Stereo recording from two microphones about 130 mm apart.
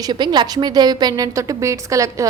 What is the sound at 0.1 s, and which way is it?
A woman's voice, 35° right (ahead or behind).